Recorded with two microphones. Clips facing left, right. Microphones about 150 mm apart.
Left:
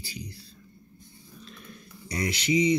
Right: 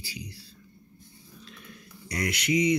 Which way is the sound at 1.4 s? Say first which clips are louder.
Left 2 dB; 35° left (ahead or behind).